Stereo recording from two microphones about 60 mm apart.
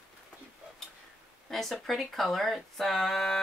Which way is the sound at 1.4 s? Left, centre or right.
Centre.